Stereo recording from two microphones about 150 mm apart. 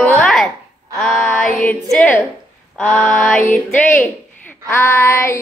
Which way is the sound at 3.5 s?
5° left (ahead or behind).